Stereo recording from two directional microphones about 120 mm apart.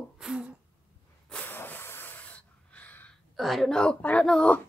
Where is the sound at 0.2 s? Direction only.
5° right (ahead or behind).